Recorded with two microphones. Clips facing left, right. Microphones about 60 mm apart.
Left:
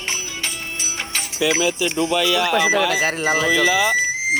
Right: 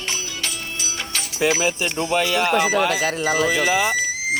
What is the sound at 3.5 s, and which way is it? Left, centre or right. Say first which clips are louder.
Speech: left 2 dB; right.